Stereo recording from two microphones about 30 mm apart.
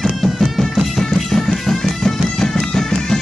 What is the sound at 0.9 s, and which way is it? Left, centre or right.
Music, centre.